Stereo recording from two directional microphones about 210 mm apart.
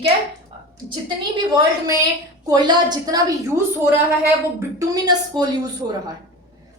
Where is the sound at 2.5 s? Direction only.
20° right (ahead or behind).